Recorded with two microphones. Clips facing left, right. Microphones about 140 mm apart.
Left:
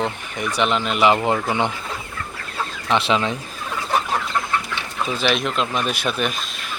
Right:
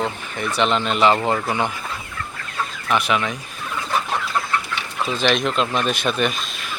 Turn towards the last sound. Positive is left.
turn(degrees=0)  # may be behind; listen again after turning